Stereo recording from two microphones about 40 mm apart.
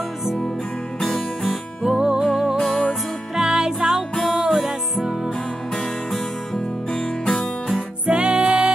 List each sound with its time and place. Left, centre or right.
1.0 s music: centre
1.8 s music: centre
4.5 s music: centre
6.1 s music: centre
8.1 s music: right